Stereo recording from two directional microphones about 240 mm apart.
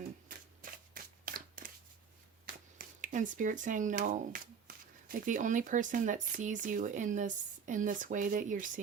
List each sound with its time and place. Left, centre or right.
0.3 s shuffling cards: right
2.5 s speech: right